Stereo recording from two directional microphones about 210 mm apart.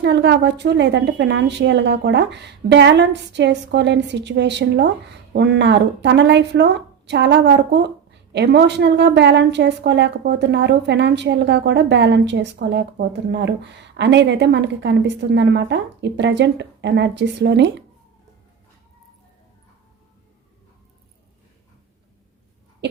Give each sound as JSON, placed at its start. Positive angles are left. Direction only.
{"t": 0.0, "sound": "a woman's voice", "side_deg": -55}